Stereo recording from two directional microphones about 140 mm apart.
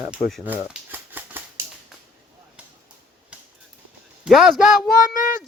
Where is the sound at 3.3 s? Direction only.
10° right (ahead or behind).